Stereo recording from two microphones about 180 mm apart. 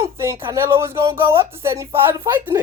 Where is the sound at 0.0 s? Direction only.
15° right (ahead or behind).